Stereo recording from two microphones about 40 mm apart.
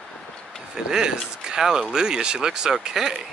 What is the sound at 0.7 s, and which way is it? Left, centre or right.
Speech, centre.